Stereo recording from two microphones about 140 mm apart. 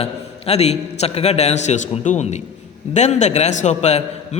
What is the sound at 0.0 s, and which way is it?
A man's voice, 45° left (ahead or behind).